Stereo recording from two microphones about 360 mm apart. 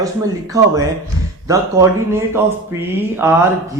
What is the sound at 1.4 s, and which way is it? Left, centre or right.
Speech, centre.